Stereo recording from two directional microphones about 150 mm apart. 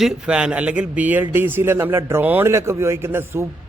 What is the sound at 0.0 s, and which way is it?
A man's voice, 5° right (ahead or behind).